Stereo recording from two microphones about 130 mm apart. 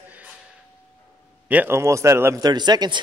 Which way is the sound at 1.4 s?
15° right (ahead or behind).